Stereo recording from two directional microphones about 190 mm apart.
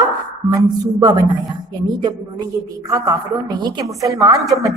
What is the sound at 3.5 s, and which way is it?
Speech, 20° right (ahead or behind).